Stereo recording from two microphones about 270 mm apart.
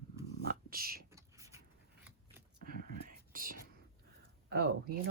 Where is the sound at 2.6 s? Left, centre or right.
Right.